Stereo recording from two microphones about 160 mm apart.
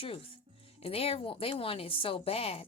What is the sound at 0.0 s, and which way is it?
Speech, 35° left (ahead or behind).